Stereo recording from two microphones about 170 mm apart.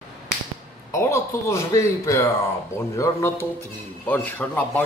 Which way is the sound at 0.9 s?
15° left (ahead or behind).